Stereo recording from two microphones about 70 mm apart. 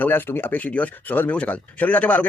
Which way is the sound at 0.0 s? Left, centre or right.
Left.